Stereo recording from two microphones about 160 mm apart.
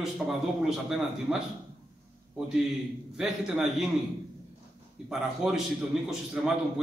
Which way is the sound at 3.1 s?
Centre (ahead or behind).